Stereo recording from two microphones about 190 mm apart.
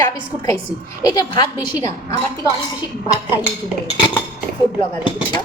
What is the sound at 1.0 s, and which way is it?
A woman's voice, 20° left (ahead or behind).